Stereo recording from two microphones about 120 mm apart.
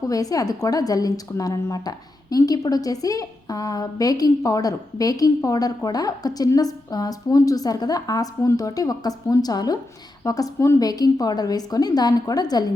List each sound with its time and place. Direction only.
0.0 s a woman's voice: 30° left (ahead or behind)